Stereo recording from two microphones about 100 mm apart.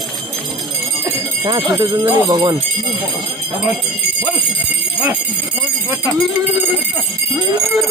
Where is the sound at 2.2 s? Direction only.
45° right (ahead or behind).